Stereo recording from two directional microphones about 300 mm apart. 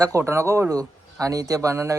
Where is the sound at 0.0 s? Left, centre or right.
Centre.